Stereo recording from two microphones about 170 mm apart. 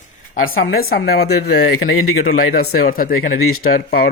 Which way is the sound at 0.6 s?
65° left (ahead or behind).